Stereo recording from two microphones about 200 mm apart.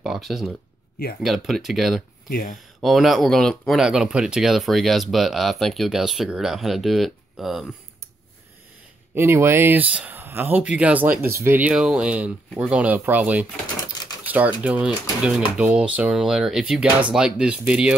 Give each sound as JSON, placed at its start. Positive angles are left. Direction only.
{"t": 0.0, "sound": "speech", "side_deg": 0}
{"t": 2.2, "sound": "speech", "side_deg": 45}
{"t": 2.8, "sound": "speech", "side_deg": 0}
{"t": 9.1, "sound": "speech", "side_deg": -10}